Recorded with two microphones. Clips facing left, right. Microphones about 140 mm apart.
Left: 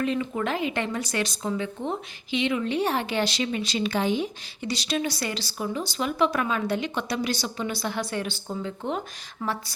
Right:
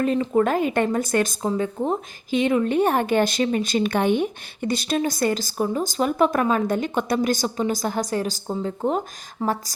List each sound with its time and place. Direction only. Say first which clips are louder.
0.0 s speech: right 7 dB; 40° right (ahead or behind)